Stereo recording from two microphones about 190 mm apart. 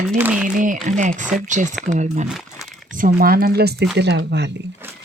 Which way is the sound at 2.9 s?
45° right (ahead or behind).